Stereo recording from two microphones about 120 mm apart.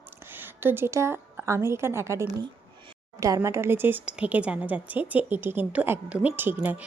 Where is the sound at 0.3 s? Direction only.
15° right (ahead or behind).